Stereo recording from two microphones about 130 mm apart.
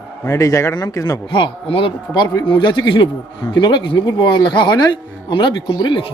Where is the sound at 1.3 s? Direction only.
40° left (ahead or behind).